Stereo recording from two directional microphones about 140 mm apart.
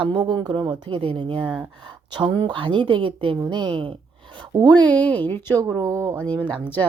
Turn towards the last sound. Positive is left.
turn(degrees=10)  # may be behind; listen again after turning